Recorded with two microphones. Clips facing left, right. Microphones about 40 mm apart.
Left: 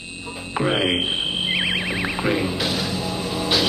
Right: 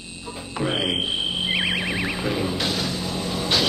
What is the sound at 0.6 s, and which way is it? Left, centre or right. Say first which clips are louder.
Music: left 3 dB; centre.